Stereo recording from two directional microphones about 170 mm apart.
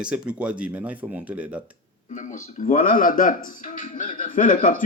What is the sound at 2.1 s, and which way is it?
A man's voice, 50° left (ahead or behind).